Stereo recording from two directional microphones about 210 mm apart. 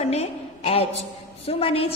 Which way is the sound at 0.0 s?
30° left (ahead or behind).